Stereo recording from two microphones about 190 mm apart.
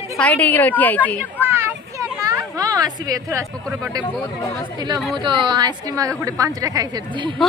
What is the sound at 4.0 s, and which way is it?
Speech, 10° left (ahead or behind).